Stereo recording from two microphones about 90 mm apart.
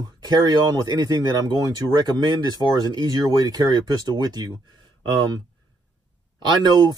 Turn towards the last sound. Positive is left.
turn(degrees=-50)  # may be behind; listen again after turning